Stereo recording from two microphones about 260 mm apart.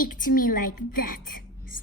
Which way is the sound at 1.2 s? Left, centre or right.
Left.